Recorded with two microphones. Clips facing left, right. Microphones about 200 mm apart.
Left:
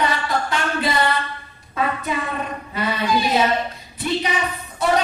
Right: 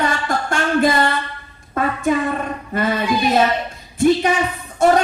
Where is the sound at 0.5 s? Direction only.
50° right (ahead or behind).